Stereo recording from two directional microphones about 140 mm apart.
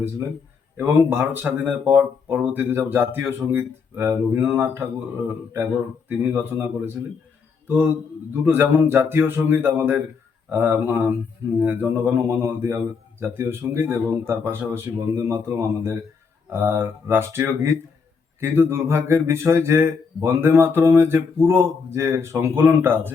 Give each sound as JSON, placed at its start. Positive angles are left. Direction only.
{"t": 0.8, "sound": "speech", "side_deg": -15}